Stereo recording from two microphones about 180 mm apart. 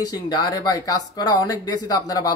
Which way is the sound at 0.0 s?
20° left (ahead or behind).